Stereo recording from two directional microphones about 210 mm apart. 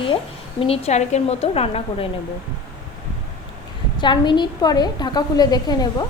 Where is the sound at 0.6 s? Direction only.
30° left (ahead or behind).